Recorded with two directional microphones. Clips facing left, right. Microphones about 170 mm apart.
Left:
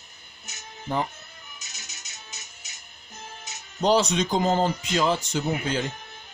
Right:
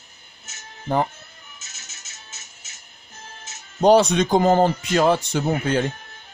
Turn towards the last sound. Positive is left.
turn(degrees=-60)  # may be behind; listen again after turning